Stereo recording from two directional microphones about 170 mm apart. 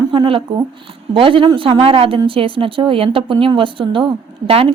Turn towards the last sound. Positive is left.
turn(degrees=-35)  # may be behind; listen again after turning